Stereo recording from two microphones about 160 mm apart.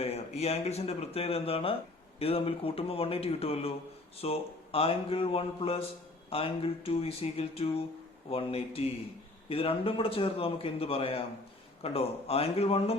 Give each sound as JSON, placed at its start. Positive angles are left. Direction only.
{"t": 0.0, "sound": "speech", "side_deg": 40}